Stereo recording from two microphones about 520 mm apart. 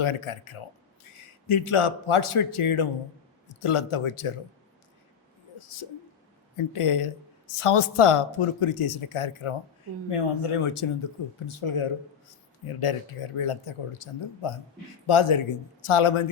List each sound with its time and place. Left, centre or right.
0.0 s speech: left
5.5 s speech: left